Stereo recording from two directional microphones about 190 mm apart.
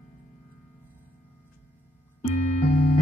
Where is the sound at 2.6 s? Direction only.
45° left (ahead or behind).